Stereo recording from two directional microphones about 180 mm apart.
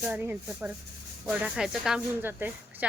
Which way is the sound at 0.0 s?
10° right (ahead or behind).